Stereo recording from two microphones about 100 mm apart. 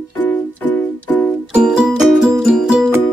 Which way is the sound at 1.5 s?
10° right (ahead or behind).